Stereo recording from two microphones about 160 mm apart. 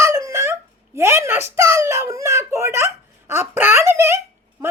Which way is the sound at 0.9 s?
15° right (ahead or behind).